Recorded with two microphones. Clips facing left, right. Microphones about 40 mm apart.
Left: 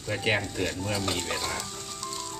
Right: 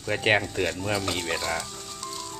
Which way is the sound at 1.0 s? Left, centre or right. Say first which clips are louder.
Right 1 dB; centre.